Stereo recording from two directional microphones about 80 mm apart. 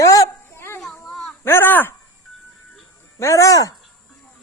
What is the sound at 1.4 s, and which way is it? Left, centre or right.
Speech, left.